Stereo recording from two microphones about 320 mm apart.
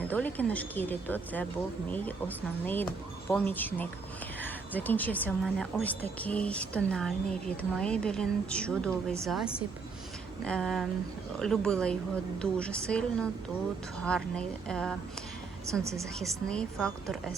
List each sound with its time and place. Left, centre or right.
0.1 s speech: centre
15.8 s a woman's voice: centre
16.1 s speech: centre